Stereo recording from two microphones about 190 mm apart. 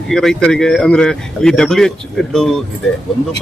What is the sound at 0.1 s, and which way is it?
Speech, centre (ahead or behind).